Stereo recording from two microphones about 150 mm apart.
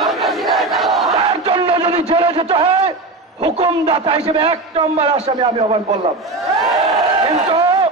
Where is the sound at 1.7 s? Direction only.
40° right (ahead or behind).